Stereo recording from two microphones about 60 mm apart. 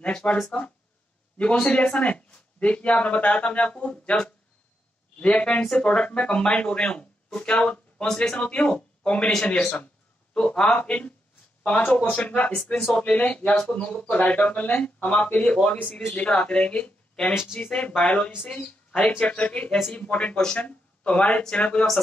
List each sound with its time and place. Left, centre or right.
0.0 s speech: left
1.4 s speech: centre
5.2 s speech: centre
8.4 s speech: left
10.3 s speech: centre